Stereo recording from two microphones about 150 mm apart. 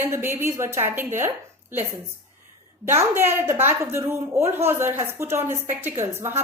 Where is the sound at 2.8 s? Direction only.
15° right (ahead or behind).